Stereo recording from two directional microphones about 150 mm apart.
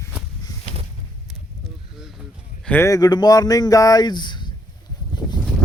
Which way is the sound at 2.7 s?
20° left (ahead or behind).